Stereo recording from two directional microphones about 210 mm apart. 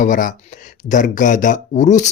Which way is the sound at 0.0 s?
40° left (ahead or behind).